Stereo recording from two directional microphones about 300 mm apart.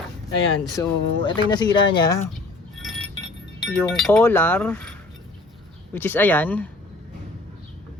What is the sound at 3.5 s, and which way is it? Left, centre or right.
Speech, centre.